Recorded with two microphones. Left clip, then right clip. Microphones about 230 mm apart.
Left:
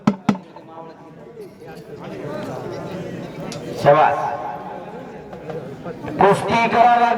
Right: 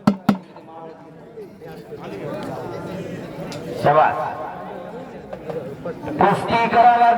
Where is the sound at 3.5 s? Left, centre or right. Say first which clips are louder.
Left 3 dB; left.